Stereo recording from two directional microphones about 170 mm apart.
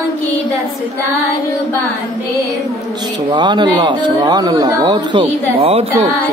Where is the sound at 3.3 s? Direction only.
25° right (ahead or behind).